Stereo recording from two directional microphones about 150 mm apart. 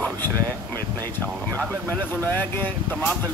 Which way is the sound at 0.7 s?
10° left (ahead or behind).